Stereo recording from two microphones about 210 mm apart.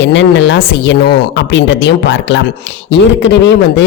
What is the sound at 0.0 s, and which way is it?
A woman's voice, 60° left (ahead or behind).